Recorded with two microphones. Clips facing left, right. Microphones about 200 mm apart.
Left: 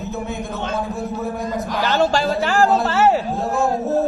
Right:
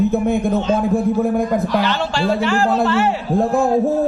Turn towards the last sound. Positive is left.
turn(degrees=40)  # may be behind; listen again after turning